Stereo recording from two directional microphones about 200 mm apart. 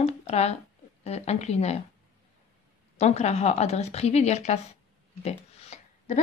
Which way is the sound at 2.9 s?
35° left (ahead or behind).